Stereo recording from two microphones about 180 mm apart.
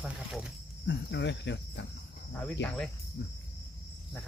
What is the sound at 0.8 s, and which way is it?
Cricket, 75° left (ahead or behind).